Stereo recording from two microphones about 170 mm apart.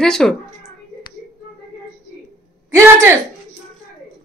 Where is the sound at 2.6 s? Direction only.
15° right (ahead or behind).